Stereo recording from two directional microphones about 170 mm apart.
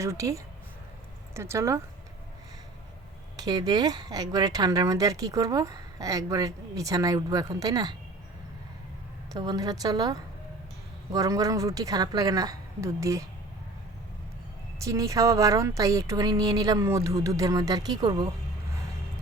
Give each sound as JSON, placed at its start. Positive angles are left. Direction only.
{"t": 0.0, "sound": "speech", "side_deg": -20}
{"t": 3.3, "sound": "speech", "side_deg": -25}
{"t": 9.3, "sound": "speech", "side_deg": -20}
{"t": 14.8, "sound": "speech", "side_deg": -20}